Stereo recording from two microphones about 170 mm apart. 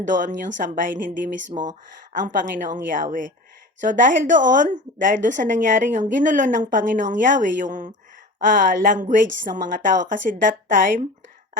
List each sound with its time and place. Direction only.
0.0 s a woman's voice: 50° right (ahead or behind)